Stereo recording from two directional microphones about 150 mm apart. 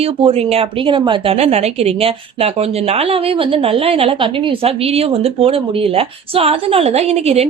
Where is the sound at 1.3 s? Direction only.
45° right (ahead or behind).